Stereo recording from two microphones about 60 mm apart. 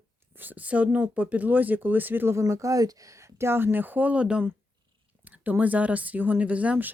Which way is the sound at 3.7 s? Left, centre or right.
Right.